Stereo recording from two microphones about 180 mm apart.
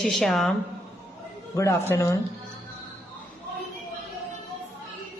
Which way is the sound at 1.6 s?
15° left (ahead or behind).